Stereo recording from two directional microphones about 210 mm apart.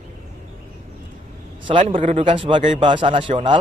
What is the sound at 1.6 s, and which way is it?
A man's voice, 25° right (ahead or behind).